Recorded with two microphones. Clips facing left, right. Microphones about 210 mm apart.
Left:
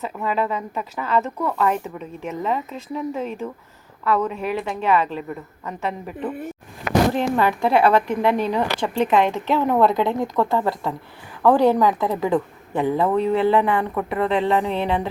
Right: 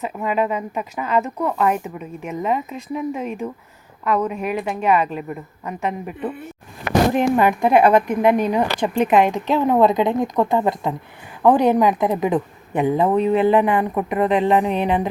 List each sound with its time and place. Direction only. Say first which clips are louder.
0.0 s a woman's voice: right 2 dB; 15° right (ahead or behind)
7.1 s a woman's voice: right 3 dB; 15° right (ahead or behind)